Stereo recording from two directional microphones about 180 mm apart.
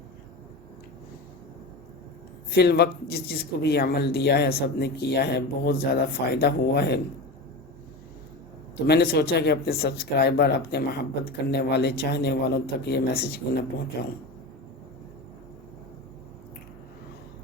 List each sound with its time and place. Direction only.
2.6 s speech: 65° left (ahead or behind)
8.9 s speech: 65° left (ahead or behind)